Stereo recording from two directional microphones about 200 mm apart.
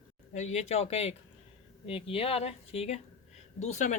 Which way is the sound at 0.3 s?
35° left (ahead or behind).